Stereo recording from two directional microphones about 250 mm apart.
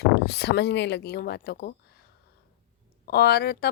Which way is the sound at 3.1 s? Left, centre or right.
Left.